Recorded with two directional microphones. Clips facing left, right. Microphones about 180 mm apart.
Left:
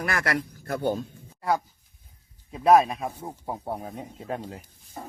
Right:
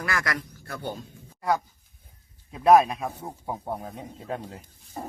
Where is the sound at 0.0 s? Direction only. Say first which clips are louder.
Left 3 dB; 25° left (ahead or behind).